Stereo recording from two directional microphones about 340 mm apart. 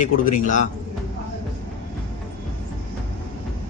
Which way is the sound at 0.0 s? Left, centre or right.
Left.